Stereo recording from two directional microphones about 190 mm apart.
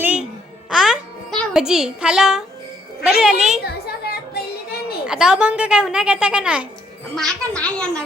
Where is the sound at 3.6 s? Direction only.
55° left (ahead or behind).